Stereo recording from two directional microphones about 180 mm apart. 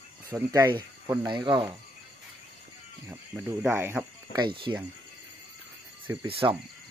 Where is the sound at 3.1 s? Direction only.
15° right (ahead or behind).